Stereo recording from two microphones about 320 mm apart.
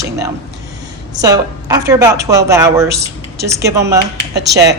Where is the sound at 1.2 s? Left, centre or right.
Centre.